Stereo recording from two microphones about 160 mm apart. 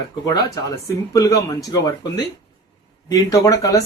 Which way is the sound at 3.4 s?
20° left (ahead or behind).